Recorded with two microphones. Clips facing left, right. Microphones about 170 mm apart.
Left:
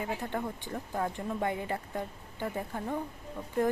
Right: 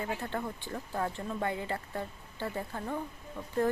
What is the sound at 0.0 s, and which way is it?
Speech, 15° left (ahead or behind).